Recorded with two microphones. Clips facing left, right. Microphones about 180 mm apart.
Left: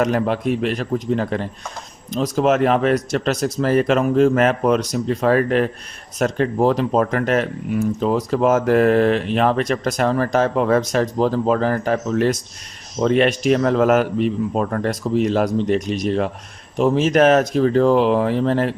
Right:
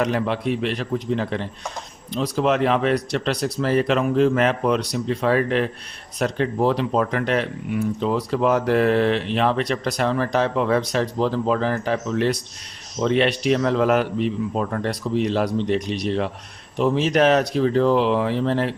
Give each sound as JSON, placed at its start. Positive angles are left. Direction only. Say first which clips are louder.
{"t": 0.0, "sound": "speech", "louder": "left 3 dB", "side_deg": 45}